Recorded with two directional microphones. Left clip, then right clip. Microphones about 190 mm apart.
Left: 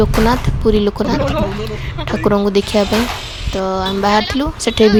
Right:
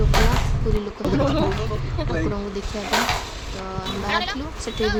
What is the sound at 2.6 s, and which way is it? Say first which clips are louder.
Speech: left 9 dB; 55° left (ahead or behind).